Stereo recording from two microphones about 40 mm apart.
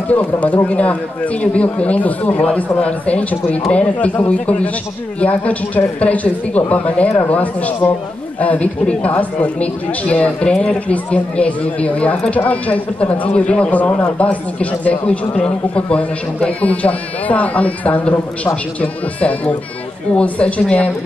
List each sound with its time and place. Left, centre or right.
0.1 s speech: left